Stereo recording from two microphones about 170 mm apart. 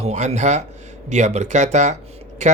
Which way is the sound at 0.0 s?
40° right (ahead or behind).